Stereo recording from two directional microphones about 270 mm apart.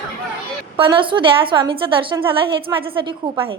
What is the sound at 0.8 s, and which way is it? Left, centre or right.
A woman's voice, centre.